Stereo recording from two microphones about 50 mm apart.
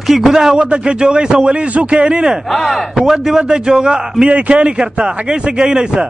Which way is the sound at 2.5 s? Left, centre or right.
Centre.